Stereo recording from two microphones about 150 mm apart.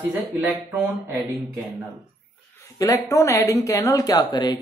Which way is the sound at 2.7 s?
20° left (ahead or behind).